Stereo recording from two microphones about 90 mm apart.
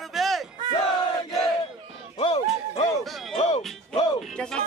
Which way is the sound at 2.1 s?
90° left.